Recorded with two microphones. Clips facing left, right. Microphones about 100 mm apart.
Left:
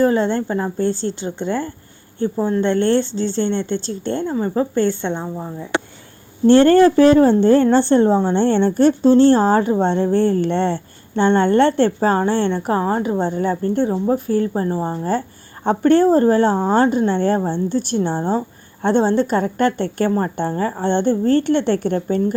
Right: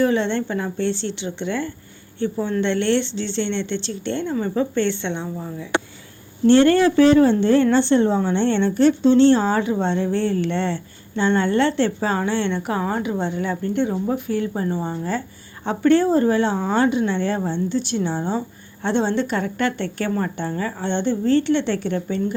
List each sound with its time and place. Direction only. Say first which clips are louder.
0.0 s a woman's voice: left 3 dB; 40° left (ahead or behind)
6.5 s a woman's voice: left 4 dB; 45° left (ahead or behind)